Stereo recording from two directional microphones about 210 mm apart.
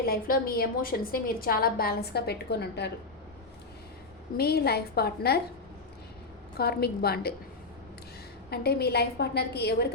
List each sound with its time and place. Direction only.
0.0 s a woman's voice: 45° left (ahead or behind)
4.4 s a woman's voice: 50° left (ahead or behind)
6.6 s a woman's voice: 50° left (ahead or behind)
8.4 s a woman's voice: 50° left (ahead or behind)